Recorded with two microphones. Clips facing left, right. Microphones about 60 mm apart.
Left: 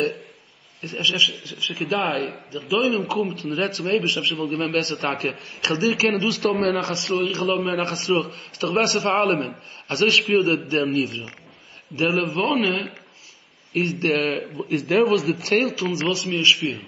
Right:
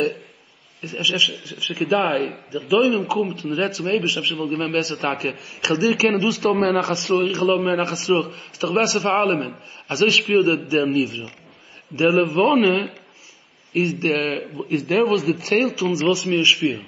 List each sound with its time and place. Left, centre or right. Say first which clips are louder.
0.7 s a man's voice: even; centre; by 16.8 s right